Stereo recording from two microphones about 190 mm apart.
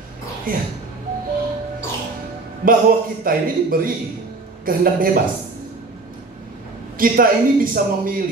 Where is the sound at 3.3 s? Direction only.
50° right (ahead or behind).